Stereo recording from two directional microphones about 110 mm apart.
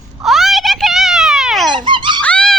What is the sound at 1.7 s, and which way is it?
Dog, 45° right (ahead or behind).